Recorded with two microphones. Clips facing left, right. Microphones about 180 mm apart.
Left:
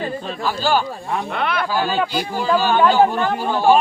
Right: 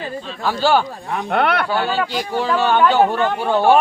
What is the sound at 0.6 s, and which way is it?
Speech, 70° right (ahead or behind).